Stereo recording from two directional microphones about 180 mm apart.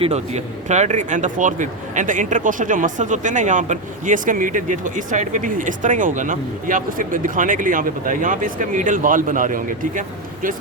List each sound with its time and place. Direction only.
0.0 s speech: 35° right (ahead or behind)